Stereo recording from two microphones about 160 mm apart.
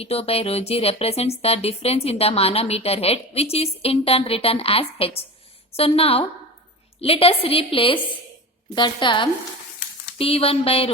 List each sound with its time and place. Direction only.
0.0 s a woman's voice: 40° left (ahead or behind)